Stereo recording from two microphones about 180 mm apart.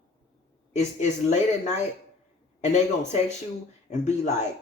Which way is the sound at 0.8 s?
40° left (ahead or behind).